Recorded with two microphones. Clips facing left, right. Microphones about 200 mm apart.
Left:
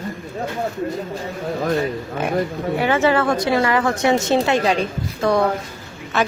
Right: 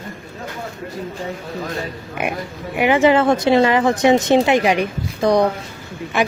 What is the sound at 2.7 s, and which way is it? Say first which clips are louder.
Speech: right 4 dB; 15° right (ahead or behind).